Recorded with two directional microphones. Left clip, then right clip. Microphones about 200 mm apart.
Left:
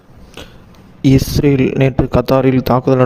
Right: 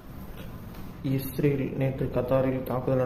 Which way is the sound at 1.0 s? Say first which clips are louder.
Left 15 dB; 65° left (ahead or behind).